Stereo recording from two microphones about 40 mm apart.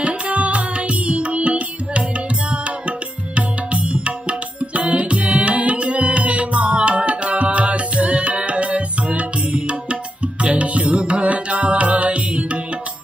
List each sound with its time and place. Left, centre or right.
0.0 s music: right
3.3 s music: right